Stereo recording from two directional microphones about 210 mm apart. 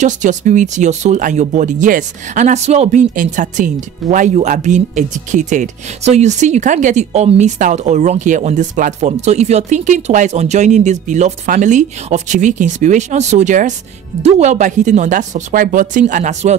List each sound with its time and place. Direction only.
0.0 s speech: 35° right (ahead or behind)